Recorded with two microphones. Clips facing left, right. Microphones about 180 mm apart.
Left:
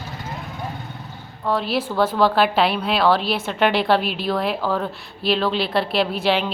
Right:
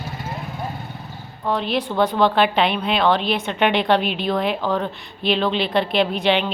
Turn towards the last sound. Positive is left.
turn(degrees=5)  # may be behind; listen again after turning